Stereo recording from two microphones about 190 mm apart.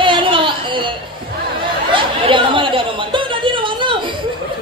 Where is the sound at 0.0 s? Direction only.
25° right (ahead or behind).